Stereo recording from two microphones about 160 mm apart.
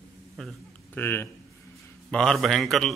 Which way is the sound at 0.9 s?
15° left (ahead or behind).